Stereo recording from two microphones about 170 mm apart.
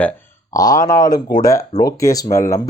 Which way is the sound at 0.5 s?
20° left (ahead or behind).